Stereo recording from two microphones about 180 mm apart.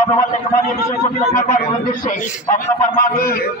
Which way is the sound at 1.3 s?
45° left (ahead or behind).